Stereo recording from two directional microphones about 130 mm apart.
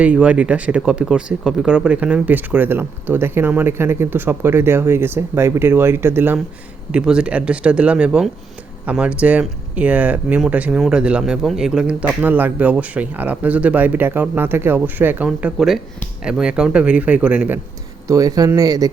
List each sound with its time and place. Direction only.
0.0 s speech: 10° right (ahead or behind)
18.1 s speech: 25° right (ahead or behind)